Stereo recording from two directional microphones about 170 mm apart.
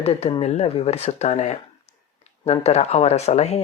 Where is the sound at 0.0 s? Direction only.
35° left (ahead or behind).